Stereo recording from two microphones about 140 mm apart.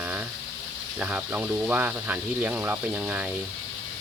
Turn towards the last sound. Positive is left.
turn(degrees=-10)  # may be behind; listen again after turning